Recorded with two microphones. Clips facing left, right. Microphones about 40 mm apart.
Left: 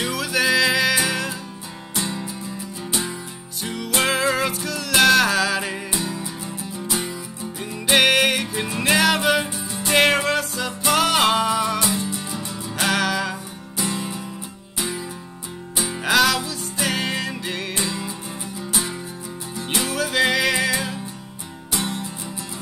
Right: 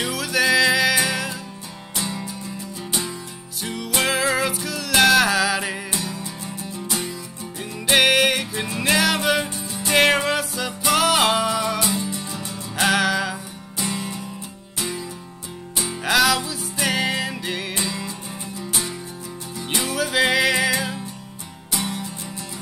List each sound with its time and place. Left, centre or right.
0.0 s music: centre
5.9 s music: centre
7.8 s music: centre
21.7 s music: centre